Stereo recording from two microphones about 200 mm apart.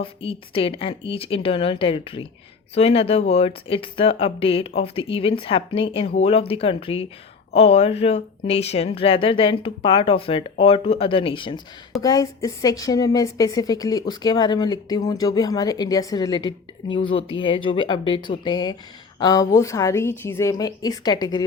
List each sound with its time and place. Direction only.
0.0 s a woman's voice: 25° left (ahead or behind)